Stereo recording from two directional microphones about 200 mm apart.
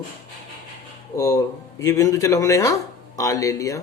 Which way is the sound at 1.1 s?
15° left (ahead or behind).